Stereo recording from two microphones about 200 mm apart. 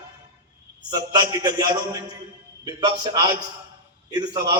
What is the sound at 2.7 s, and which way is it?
A man's voice, 20° right (ahead or behind).